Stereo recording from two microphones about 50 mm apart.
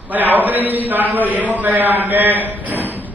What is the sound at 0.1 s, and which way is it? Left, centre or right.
A man's voice, right.